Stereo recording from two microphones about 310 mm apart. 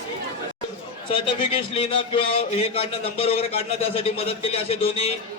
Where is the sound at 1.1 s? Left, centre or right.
Centre.